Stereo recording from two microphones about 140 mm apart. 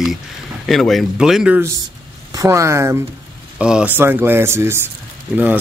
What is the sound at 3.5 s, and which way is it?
Speech, 5° right (ahead or behind).